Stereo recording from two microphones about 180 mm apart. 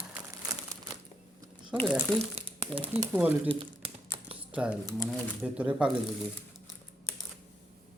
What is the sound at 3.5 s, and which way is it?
Crumpling, 30° right (ahead or behind).